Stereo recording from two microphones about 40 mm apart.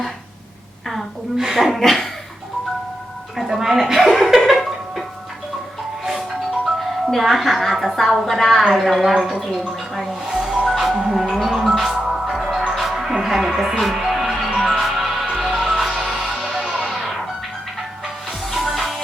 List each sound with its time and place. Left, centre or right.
1.5 s a woman's voice: centre
3.3 s a sound: centre
6.7 s a woman's voice: centre
10.2 s music: centre
13.5 s speech: centre
14.4 s music: centre
18.3 s music: centre